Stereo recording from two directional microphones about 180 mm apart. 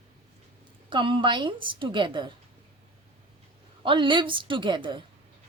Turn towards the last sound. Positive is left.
turn(degrees=-25)  # may be behind; listen again after turning